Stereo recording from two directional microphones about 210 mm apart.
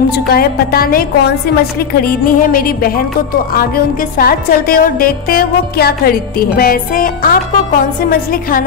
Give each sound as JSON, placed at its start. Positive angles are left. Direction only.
{"t": 0.1, "sound": "a woman's voice", "side_deg": 45}